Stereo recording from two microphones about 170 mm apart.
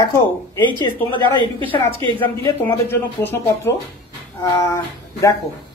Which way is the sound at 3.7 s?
15° left (ahead or behind).